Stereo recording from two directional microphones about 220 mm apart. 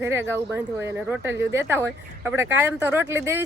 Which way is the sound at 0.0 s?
10° right (ahead or behind).